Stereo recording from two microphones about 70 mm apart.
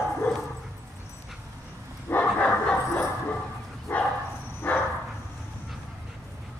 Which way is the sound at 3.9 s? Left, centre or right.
Left.